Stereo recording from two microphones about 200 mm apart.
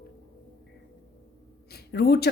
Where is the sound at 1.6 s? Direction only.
55° left (ahead or behind).